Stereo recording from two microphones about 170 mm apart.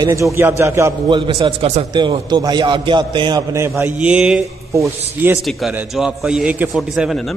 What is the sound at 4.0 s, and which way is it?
A man's voice, 5° right (ahead or behind).